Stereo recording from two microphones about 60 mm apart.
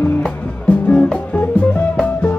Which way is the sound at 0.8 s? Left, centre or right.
Centre.